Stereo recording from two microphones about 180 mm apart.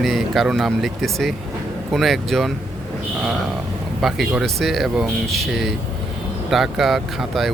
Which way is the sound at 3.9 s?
Centre (ahead or behind).